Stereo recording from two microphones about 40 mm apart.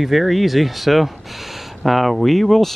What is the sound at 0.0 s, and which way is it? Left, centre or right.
Speech, centre.